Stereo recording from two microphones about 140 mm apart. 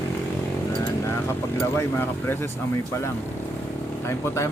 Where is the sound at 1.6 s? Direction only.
15° left (ahead or behind).